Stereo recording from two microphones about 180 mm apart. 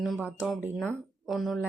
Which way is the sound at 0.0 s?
5° right (ahead or behind).